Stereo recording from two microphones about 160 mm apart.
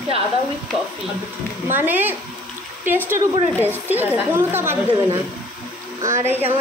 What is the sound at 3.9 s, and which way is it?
A woman's voice, 10° right (ahead or behind).